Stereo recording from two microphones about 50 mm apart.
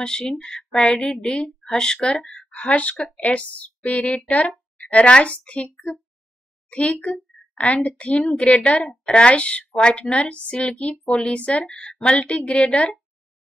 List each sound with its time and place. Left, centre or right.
0.0 s speech: centre
2.5 s a woman's voice: left
6.7 s a woman's voice: left
11.1 s speech: centre
11.3 s a woman's voice: left